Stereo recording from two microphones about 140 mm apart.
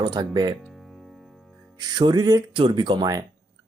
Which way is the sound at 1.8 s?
30° right (ahead or behind).